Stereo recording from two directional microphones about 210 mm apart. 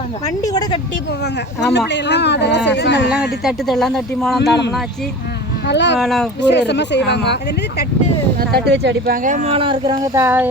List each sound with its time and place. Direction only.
0.4 s a woman's voice: 20° left (ahead or behind)
1.2 s speech: 55° left (ahead or behind)
3.4 s speech: centre (ahead or behind)
5.6 s speech: 55° left (ahead or behind)
6.0 s speech: centre (ahead or behind)
6.4 s speech: 55° left (ahead or behind)
8.4 s speech: 50° right (ahead or behind); by 10.5 s 10° right (ahead or behind)